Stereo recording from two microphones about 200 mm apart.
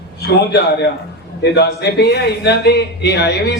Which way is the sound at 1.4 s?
55° left (ahead or behind).